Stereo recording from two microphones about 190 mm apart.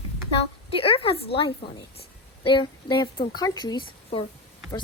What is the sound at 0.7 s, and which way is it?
A woman's voice, 30° left (ahead or behind).